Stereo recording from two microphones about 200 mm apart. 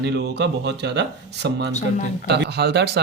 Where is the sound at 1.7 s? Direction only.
35° left (ahead or behind).